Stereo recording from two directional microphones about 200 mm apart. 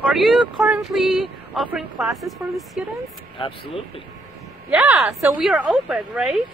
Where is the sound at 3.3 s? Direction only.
25° left (ahead or behind).